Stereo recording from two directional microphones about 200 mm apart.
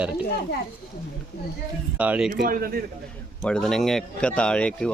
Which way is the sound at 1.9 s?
5° right (ahead or behind).